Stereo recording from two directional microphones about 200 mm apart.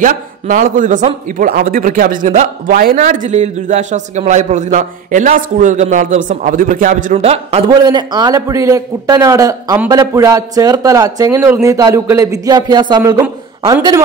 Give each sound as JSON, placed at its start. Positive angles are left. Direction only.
{"t": 0.0, "sound": "a man's voice", "side_deg": -40}